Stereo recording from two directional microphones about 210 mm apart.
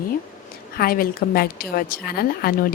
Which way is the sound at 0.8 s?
45° left (ahead or behind).